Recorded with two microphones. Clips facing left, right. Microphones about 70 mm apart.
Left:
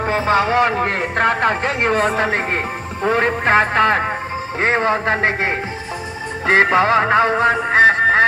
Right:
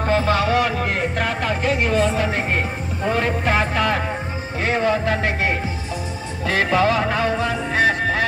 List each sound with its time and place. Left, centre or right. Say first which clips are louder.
0.0 s speech: left 2 dB; left
6.4 s music: left 4 dB; left